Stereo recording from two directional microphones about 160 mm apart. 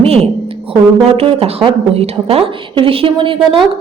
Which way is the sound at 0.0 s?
40° right (ahead or behind).